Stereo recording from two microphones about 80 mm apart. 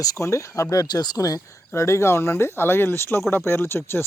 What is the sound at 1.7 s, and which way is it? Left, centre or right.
Speech, left.